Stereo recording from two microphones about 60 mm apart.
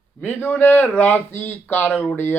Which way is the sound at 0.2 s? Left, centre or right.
Left.